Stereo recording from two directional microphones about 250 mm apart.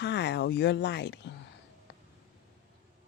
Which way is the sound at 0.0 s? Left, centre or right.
Left.